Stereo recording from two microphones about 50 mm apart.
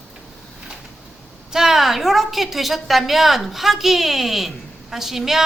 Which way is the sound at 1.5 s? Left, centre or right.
Centre.